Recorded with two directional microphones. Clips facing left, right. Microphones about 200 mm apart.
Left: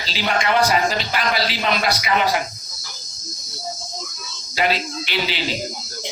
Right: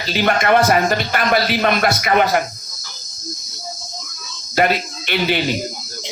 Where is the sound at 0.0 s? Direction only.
55° right (ahead or behind).